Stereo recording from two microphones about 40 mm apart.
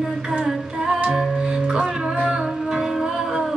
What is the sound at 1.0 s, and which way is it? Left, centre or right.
Music, centre.